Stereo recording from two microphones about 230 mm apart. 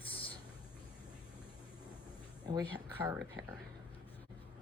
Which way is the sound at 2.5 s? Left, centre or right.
Centre.